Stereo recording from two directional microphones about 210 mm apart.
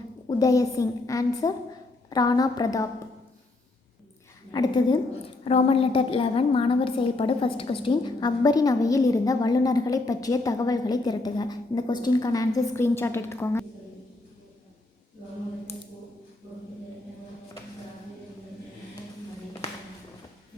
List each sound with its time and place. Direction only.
0.3 s a woman's voice: 15° left (ahead or behind)
4.5 s a woman's voice: 20° left (ahead or behind)